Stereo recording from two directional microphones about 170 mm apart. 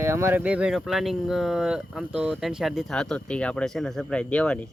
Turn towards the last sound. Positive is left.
turn(degrees=5)  # may be behind; listen again after turning